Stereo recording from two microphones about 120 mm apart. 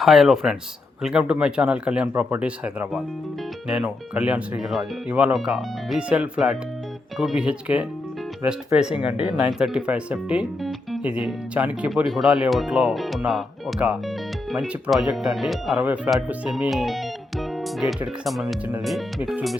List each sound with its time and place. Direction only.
0.0 s speech: centre (ahead or behind)
10.6 s music: centre (ahead or behind)
11.0 s speech: 10° right (ahead or behind)
16.1 s speech: 15° right (ahead or behind)